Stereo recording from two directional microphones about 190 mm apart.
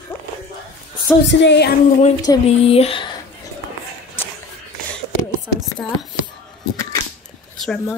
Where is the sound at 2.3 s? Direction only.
30° left (ahead or behind).